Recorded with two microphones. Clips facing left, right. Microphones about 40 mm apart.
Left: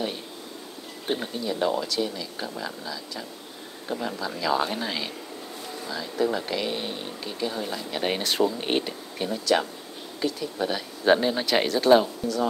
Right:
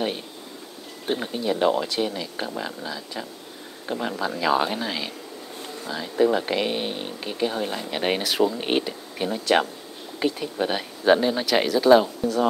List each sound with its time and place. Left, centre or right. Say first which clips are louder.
1.0 s speech: right 2 dB; centre
1.3 s speech: right 6 dB; right
4.7 s speech: right 1 dB; centre
5.9 s speech: right 5 dB; right
8.2 s speech: right 2 dB; centre
10.2 s speech: right 3 dB; right
11.1 s speech: right 2 dB; centre
12.2 s speech: right 3 dB; right